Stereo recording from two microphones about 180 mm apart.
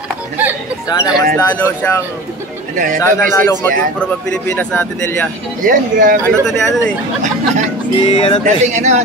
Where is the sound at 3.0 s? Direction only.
15° left (ahead or behind).